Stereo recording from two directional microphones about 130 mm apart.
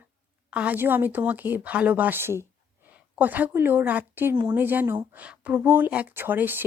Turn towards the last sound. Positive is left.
turn(degrees=-15)  # may be behind; listen again after turning